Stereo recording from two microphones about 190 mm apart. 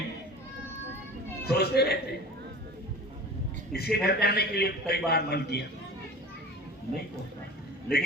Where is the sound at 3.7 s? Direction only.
55° left (ahead or behind).